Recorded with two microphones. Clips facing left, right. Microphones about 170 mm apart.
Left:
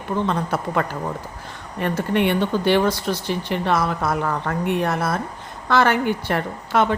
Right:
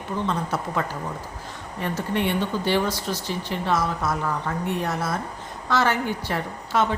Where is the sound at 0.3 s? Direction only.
60° left (ahead or behind).